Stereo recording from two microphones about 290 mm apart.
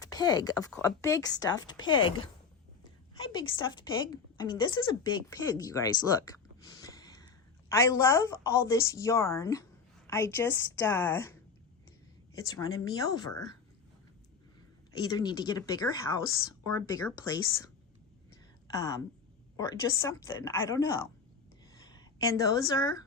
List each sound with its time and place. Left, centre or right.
0.0 s a woman's voice: centre
3.5 s a woman's voice: centre
6.8 s a woman's voice: centre
14.9 s a woman's voice: centre
18.7 s a woman's voice: centre